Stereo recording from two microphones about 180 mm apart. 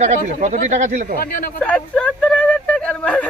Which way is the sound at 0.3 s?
40° right (ahead or behind).